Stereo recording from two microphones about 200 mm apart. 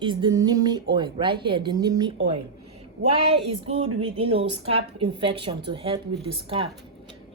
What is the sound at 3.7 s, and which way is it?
A woman's voice, 30° right (ahead or behind).